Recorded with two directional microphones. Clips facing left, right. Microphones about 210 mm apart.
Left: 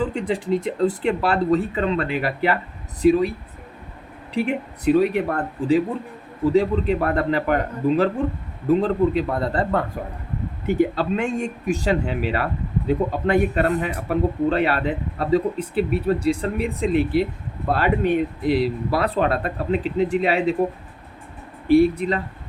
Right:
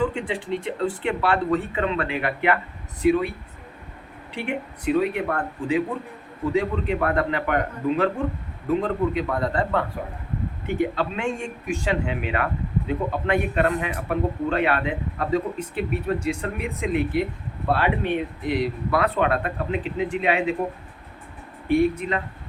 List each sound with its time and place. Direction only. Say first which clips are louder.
0.0 s a man's voice: left 2 dB; 40° left (ahead or behind)
4.4 s a man's voice: left 6 dB; 40° left (ahead or behind)
21.7 s a man's voice: left 5 dB; 35° left (ahead or behind)